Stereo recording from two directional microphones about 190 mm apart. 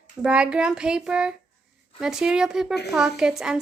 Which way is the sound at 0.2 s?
5° right (ahead or behind).